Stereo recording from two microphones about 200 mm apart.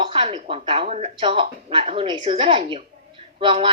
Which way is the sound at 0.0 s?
30° right (ahead or behind).